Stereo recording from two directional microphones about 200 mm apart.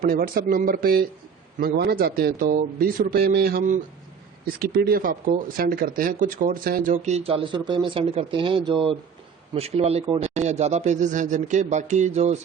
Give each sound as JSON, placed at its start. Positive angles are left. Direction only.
{"t": 0.0, "sound": "speech", "side_deg": -45}